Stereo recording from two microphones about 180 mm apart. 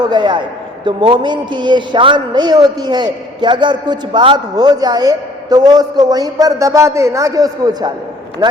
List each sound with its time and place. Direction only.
0.1 s a woman's voice: 25° right (ahead or behind)